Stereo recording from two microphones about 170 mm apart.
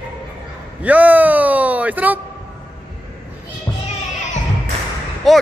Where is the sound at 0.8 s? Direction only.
10° right (ahead or behind).